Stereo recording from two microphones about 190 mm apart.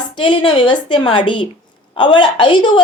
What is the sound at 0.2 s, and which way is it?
A woman's voice, 25° left (ahead or behind).